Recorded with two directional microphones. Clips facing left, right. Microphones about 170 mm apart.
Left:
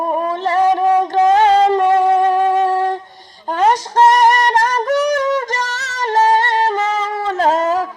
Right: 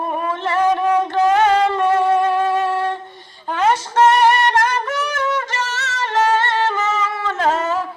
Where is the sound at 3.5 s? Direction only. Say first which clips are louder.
Left 3 dB; 35° left (ahead or behind).